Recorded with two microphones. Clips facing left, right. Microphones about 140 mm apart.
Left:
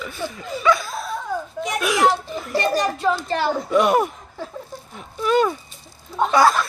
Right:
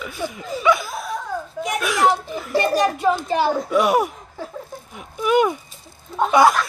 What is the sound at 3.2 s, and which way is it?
A child's voice, 10° right (ahead or behind).